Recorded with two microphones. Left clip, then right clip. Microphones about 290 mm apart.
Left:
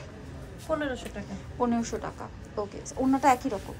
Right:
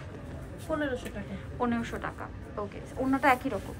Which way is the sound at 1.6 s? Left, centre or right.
Centre.